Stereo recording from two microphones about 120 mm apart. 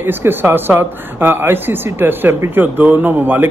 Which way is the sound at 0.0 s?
15° right (ahead or behind).